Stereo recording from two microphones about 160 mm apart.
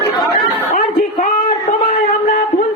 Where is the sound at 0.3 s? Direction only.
65° left (ahead or behind).